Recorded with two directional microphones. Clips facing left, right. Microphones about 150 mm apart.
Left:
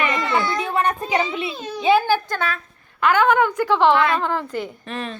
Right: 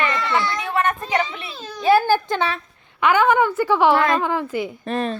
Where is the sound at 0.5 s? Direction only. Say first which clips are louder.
Left 1 dB; 30° left (ahead or behind).